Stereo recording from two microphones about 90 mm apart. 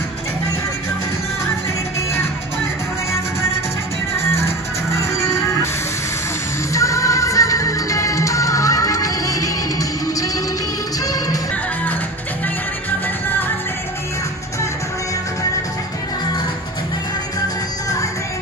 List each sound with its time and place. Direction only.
5.1 s music: 35° left (ahead or behind)
6.7 s music: 35° left (ahead or behind)